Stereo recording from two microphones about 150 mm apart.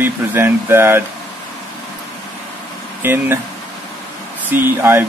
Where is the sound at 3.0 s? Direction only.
15° right (ahead or behind).